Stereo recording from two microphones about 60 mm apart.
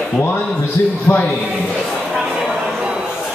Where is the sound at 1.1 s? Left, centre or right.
Left.